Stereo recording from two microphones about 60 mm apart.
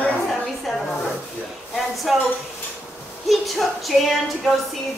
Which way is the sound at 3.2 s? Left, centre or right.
Centre.